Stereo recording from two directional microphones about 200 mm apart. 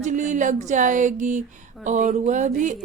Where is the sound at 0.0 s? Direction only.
40° right (ahead or behind).